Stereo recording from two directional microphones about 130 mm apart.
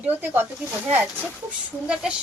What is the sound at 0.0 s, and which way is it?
A woman's voice, 15° right (ahead or behind).